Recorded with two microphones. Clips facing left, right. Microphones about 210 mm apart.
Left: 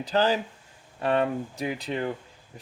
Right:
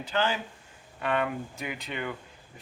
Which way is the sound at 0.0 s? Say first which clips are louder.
Left 5 dB; 35° left (ahead or behind).